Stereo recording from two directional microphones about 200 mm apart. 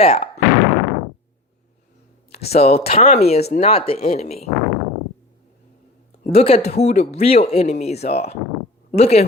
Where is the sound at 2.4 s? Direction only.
30° left (ahead or behind).